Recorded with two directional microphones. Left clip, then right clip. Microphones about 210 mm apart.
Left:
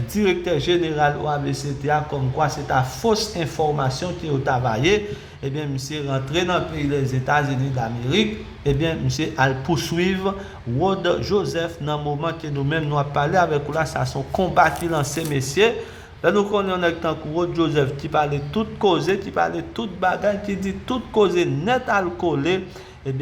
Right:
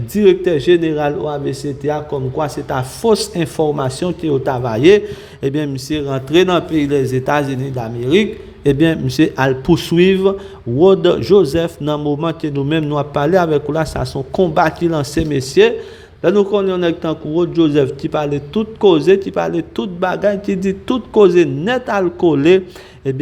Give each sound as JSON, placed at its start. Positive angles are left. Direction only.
{"t": 0.1, "sound": "a man's voice", "side_deg": -35}